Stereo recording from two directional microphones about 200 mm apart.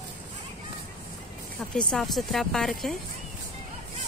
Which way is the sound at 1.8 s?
5° left (ahead or behind).